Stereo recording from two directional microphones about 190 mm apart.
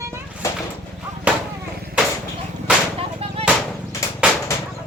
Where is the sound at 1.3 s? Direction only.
5° right (ahead or behind).